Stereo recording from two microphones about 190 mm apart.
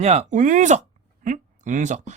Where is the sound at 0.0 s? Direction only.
35° right (ahead or behind).